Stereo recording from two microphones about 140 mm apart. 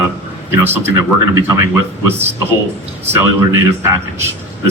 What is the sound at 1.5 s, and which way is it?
Speech, 20° right (ahead or behind).